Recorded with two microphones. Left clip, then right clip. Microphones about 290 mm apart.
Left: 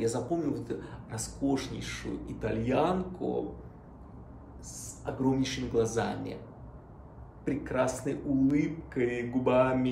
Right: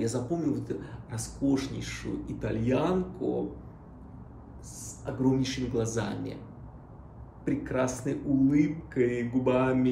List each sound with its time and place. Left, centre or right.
0.0 s speech: centre
5.0 s speech: centre
7.4 s speech: centre